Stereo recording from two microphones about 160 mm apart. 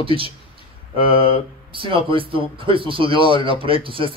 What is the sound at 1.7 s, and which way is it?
Speech, 35° right (ahead or behind).